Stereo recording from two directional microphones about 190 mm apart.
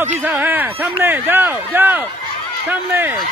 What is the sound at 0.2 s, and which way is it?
Speech, 10° right (ahead or behind).